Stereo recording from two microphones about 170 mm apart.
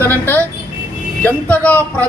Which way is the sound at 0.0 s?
10° left (ahead or behind).